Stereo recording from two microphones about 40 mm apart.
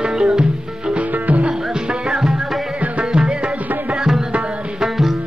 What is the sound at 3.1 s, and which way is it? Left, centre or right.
Music, right.